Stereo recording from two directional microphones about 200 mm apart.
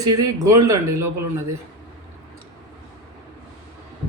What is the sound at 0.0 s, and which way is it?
Speech, 20° right (ahead or behind).